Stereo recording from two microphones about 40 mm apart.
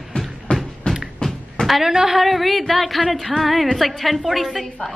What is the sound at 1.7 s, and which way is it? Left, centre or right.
A woman's voice, centre.